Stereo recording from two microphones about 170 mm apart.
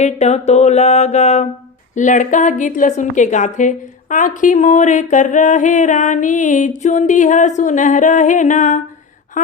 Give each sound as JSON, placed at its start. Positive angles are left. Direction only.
{"t": 0.0, "sound": "mantra", "side_deg": 40}
{"t": 2.0, "sound": "a woman's voice", "side_deg": 45}